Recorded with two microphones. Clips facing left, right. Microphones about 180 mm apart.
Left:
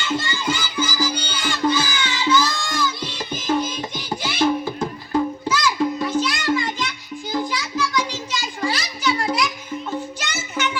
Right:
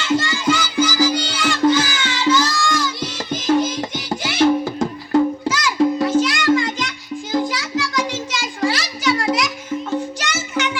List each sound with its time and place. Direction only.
0.0 s music: 90° right
5.5 s music: 90° right
10.2 s music: 80° right